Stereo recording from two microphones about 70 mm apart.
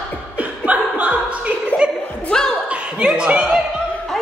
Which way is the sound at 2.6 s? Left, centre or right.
Centre.